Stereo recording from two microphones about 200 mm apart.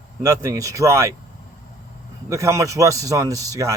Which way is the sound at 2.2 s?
15° right (ahead or behind).